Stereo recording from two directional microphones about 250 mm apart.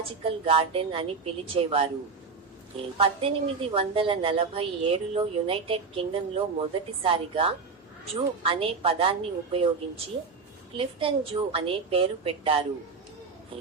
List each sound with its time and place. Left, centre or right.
0.2 s a woman's voice: right
10.8 s a woman's voice: right